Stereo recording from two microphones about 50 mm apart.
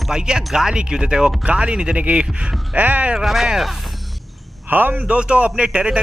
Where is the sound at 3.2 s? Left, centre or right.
Centre.